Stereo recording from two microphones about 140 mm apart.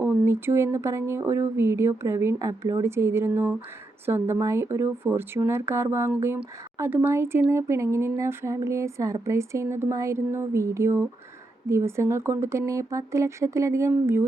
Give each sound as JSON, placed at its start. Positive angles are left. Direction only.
{"t": 0.0, "sound": "speech", "side_deg": -15}